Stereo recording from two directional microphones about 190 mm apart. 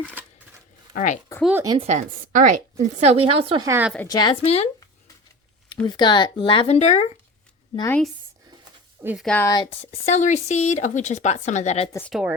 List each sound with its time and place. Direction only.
0.9 s speech: 40° left (ahead or behind)
1.5 s speech: 20° right (ahead or behind)
1.9 s a woman's voice: 40° right (ahead or behind)
3.7 s a woman's voice: 10° right (ahead or behind)
4.1 s speech: 25° left (ahead or behind)
5.8 s speech: 25° left (ahead or behind)
7.8 s a woman's voice: 10° left (ahead or behind)
9.0 s speech: 10° right (ahead or behind)
9.2 s a woman's voice: 5° left (ahead or behind)
10.1 s speech: 35° left (ahead or behind)
11.9 s a woman's voice: 10° left (ahead or behind)